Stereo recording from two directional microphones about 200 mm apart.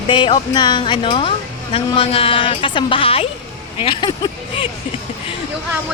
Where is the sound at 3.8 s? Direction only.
25° left (ahead or behind).